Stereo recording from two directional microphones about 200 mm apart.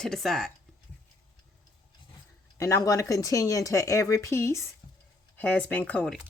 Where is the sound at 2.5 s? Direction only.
15° left (ahead or behind).